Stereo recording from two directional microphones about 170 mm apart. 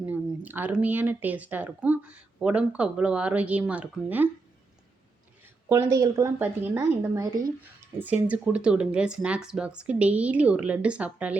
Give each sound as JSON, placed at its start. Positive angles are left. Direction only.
{"t": 0.0, "sound": "speech", "side_deg": -10}
{"t": 5.6, "sound": "speech", "side_deg": -15}